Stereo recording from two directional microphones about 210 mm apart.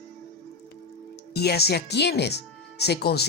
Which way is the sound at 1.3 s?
50° left (ahead or behind).